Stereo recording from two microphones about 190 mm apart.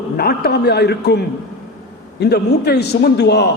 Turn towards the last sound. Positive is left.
turn(degrees=60)  # may be behind; listen again after turning